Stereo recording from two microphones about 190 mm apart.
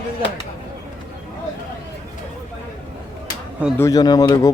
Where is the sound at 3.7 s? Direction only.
15° left (ahead or behind).